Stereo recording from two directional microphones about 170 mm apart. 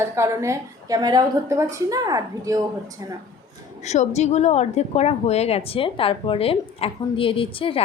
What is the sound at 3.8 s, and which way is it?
A woman's voice, 40° left (ahead or behind).